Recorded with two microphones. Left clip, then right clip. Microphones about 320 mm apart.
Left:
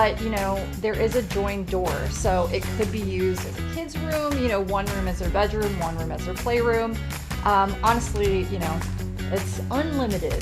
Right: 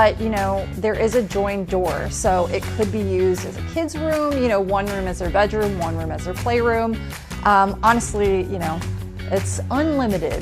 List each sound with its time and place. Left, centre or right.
0.0 s speech: right
3.8 s music: right
5.3 s speech: right
7.4 s music: right